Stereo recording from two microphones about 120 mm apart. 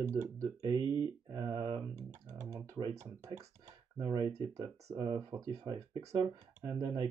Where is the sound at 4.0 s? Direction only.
35° right (ahead or behind).